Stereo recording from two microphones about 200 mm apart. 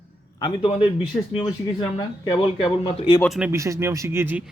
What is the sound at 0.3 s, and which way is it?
Speech, 25° left (ahead or behind).